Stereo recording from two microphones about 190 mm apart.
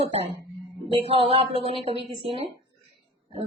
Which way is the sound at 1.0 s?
30° right (ahead or behind).